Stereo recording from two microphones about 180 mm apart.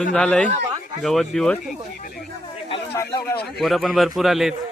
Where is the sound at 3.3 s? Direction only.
60° left (ahead or behind).